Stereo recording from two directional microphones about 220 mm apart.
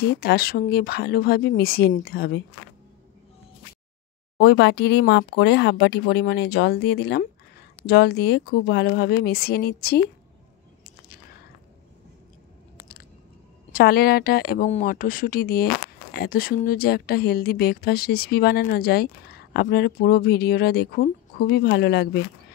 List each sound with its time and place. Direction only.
0.0 s speech: 45° left (ahead or behind)
4.4 s speech: 50° left (ahead or behind)
13.7 s speech: 45° left (ahead or behind)